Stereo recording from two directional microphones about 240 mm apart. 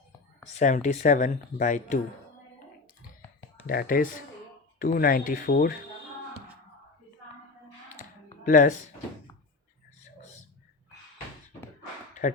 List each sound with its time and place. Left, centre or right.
0.6 s speech: left
3.7 s speech: left
8.4 s speech: left